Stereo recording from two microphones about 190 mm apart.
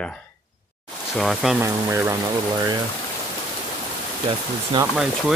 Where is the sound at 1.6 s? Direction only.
15° right (ahead or behind).